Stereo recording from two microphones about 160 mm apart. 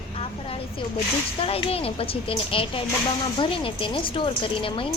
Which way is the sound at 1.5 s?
35° left (ahead or behind).